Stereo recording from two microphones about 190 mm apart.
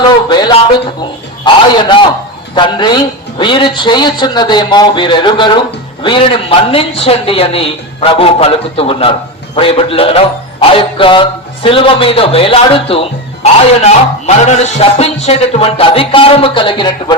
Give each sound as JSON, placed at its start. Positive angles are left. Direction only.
{"t": 0.3, "sound": "speech", "side_deg": 20}
{"t": 1.8, "sound": "a man's voice", "side_deg": 25}